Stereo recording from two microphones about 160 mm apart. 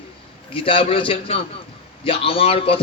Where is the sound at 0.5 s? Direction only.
35° left (ahead or behind).